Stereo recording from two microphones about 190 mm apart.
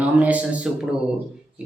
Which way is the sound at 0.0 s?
5° right (ahead or behind).